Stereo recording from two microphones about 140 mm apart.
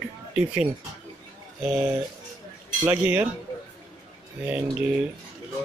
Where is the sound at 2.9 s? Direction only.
10° right (ahead or behind).